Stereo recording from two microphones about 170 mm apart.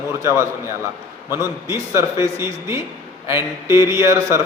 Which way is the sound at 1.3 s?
15° right (ahead or behind).